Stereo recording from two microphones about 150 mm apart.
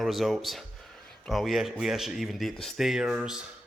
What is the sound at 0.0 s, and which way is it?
Speech, centre (ahead or behind).